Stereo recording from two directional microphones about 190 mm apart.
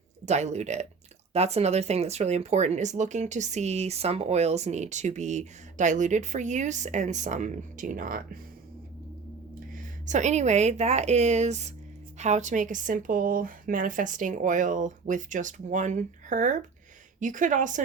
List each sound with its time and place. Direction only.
0.3 s speech: 35° right (ahead or behind)
9.7 s speech: 40° right (ahead or behind)